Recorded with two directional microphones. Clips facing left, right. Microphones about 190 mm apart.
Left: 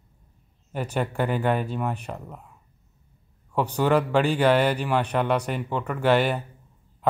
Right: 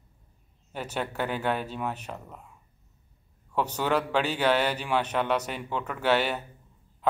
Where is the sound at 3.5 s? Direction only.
10° left (ahead or behind).